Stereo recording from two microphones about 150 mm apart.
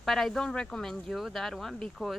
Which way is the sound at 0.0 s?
Centre (ahead or behind).